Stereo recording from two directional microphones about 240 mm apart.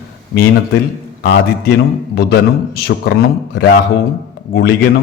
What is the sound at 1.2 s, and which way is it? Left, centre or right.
A man's voice, left.